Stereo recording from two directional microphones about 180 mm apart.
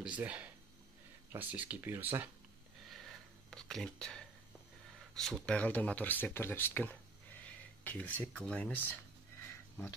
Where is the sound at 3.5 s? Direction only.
Centre (ahead or behind).